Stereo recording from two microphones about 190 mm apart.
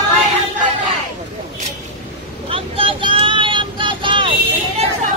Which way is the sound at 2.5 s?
30° right (ahead or behind).